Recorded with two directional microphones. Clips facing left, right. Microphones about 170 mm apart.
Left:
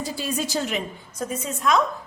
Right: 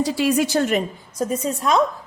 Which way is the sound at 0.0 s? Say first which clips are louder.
Right 9 dB; 75° right (ahead or behind).